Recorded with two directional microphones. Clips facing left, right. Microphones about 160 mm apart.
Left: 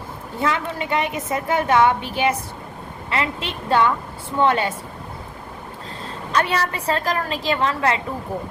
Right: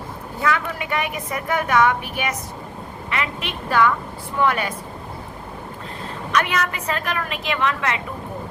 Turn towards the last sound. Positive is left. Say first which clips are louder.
# left 2 dB
turn(degrees=30)  # may be behind; listen again after turning